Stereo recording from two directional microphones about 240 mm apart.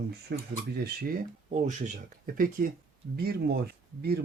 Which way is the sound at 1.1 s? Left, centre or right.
Right.